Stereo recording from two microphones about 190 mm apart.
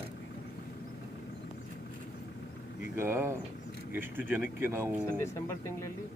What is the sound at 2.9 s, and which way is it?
Speech, 15° right (ahead or behind).